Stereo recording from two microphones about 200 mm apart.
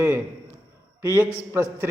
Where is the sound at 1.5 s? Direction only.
15° right (ahead or behind).